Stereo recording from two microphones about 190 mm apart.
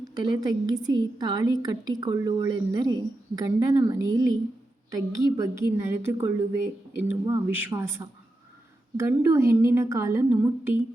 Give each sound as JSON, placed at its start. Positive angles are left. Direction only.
{"t": 0.0, "sound": "a woman's voice", "side_deg": -20}